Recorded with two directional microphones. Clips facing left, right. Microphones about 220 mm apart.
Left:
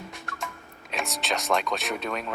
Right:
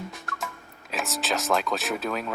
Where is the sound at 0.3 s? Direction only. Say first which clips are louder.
Right 1 dB; centre (ahead or behind).